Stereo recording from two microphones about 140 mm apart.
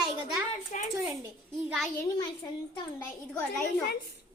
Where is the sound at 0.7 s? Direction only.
65° left (ahead or behind).